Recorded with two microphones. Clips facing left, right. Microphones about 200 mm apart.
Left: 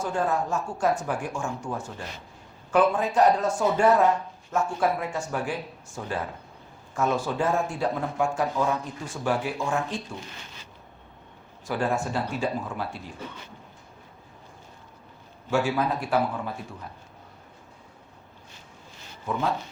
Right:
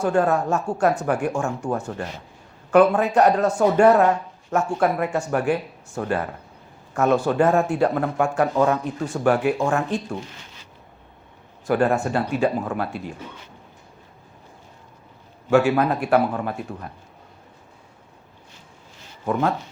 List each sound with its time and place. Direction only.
0.0 s speech: 65° right (ahead or behind)
11.7 s speech: 60° right (ahead or behind)
15.4 s speech: 65° right (ahead or behind)
19.2 s speech: 60° right (ahead or behind)